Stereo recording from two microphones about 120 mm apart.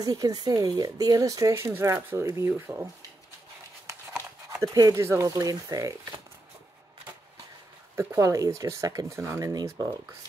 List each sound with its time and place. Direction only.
0.0 s speech: 30° right (ahead or behind)
4.7 s speech: 25° right (ahead or behind)
7.9 s speech: 20° right (ahead or behind)